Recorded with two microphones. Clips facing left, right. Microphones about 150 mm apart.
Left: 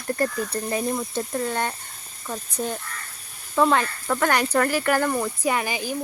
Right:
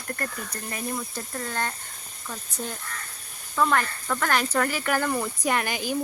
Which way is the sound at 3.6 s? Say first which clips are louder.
Left 4 dB; 20° left (ahead or behind).